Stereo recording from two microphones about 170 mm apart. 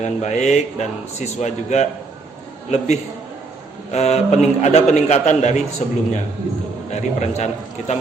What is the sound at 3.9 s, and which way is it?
A man's voice, 40° left (ahead or behind).